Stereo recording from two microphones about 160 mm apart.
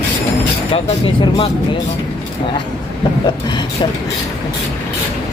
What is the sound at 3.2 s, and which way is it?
Speech, 30° left (ahead or behind).